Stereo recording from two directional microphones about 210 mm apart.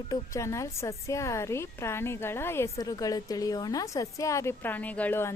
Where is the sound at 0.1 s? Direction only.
15° left (ahead or behind).